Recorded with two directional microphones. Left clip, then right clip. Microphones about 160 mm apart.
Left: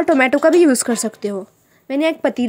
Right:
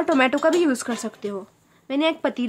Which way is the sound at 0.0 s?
20° left (ahead or behind).